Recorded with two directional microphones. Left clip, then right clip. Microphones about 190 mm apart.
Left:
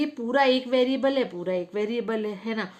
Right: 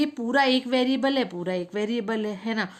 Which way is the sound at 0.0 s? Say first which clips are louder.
Even; 25° right (ahead or behind).